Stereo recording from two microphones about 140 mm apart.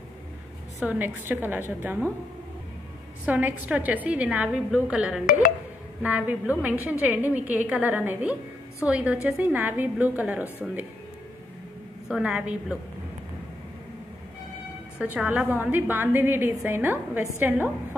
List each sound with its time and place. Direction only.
0.7 s a woman's voice: 15° right (ahead or behind)
3.3 s a woman's voice: 10° right (ahead or behind)
12.1 s a woman's voice: 5° right (ahead or behind)
15.0 s a woman's voice: 10° right (ahead or behind)